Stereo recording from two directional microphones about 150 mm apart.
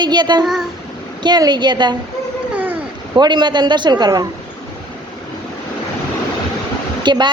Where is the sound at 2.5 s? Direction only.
10° right (ahead or behind).